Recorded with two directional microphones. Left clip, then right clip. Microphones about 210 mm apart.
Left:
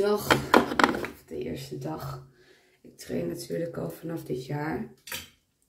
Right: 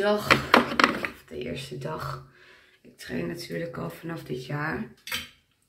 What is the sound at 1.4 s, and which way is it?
Speech, 15° right (ahead or behind).